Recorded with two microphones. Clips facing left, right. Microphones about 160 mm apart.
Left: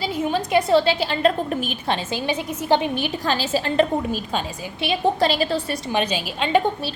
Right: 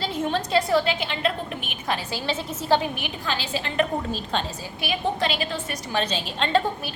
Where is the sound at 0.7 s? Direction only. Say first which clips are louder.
Left 5 dB; 30° left (ahead or behind).